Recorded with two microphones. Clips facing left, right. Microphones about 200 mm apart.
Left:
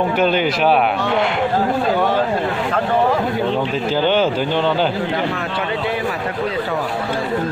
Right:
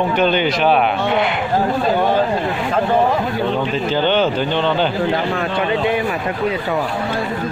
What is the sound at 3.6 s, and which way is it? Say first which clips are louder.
A man's voice: even; 5° left (ahead or behind).